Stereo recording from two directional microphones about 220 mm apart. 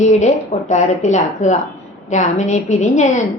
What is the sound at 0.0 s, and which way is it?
A woman's voice, 35° left (ahead or behind).